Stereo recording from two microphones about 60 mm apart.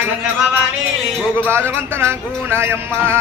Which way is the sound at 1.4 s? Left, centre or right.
Right.